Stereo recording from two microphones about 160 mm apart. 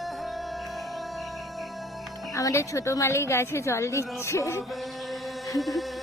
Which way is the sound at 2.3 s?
20° left (ahead or behind).